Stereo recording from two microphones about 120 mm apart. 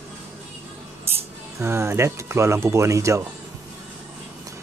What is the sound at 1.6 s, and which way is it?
Speech, 20° right (ahead or behind).